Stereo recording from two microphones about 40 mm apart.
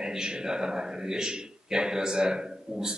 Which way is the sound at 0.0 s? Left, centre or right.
Centre.